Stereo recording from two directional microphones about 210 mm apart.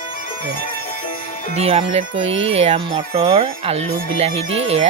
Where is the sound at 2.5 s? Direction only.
30° right (ahead or behind).